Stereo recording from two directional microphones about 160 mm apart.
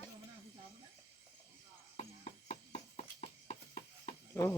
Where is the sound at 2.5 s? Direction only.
40° left (ahead or behind).